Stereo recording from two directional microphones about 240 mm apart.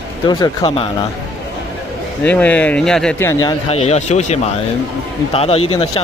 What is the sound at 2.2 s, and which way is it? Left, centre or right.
Speech, centre.